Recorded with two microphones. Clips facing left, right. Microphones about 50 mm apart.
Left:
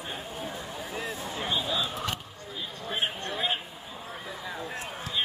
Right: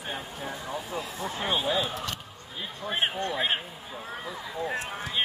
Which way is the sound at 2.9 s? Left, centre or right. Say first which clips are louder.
Right 3 dB; right.